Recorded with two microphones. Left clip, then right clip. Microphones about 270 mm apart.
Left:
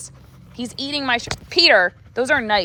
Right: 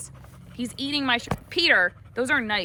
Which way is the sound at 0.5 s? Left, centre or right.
Centre.